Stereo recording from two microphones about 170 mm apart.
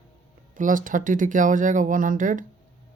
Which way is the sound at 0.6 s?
50° right (ahead or behind).